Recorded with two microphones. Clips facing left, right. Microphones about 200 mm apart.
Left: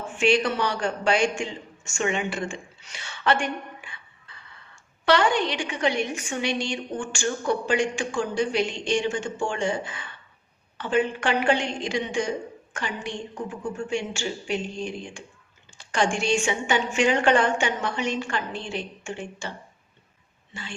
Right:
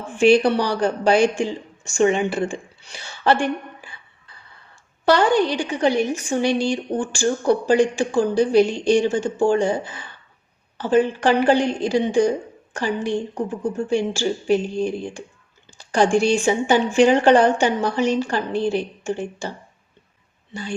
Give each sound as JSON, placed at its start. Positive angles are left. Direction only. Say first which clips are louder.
{"t": 0.1, "sound": "a woman's voice", "louder": "right 8 dB", "side_deg": -35}
{"t": 20.5, "sound": "speech", "louder": "right 9 dB", "side_deg": -40}